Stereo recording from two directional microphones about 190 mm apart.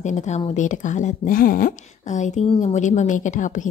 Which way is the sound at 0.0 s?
35° left (ahead or behind).